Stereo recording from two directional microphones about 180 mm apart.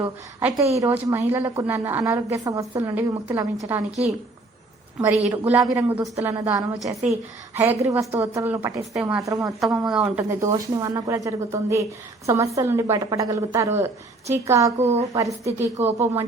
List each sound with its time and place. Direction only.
0.0 s speech: 15° right (ahead or behind)
4.9 s speech: 10° right (ahead or behind)